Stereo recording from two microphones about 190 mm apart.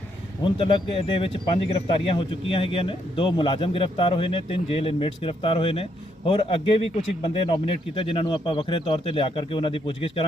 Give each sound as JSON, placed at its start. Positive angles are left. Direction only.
{"t": 0.4, "sound": "speech", "side_deg": 25}